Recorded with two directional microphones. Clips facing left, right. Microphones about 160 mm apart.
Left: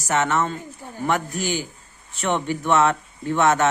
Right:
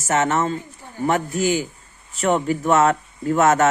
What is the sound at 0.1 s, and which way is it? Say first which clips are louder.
Speech: right 2 dB; 45° right (ahead or behind).